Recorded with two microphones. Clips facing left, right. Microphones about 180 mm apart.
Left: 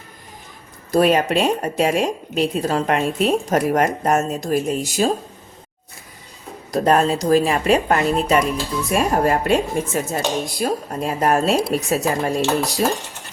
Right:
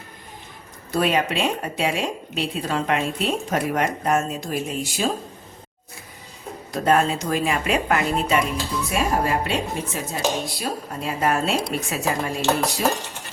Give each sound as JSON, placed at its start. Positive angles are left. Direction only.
{"t": 0.9, "sound": "speech", "side_deg": 40}
{"t": 6.7, "sound": "speech", "side_deg": 40}